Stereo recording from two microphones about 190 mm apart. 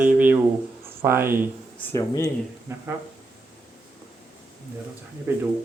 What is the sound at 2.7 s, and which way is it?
Speech, 15° right (ahead or behind).